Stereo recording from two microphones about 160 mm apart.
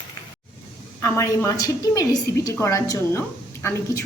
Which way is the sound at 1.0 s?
15° left (ahead or behind).